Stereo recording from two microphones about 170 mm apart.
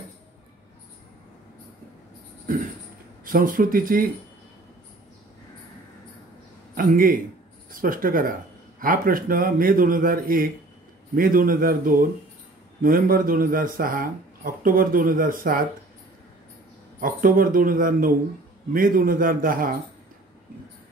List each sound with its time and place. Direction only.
2.5 s a sound: 55° right (ahead or behind)
3.3 s speech: 55° right (ahead or behind)
6.7 s a man's voice: 55° right (ahead or behind)
17.0 s speech: 55° right (ahead or behind)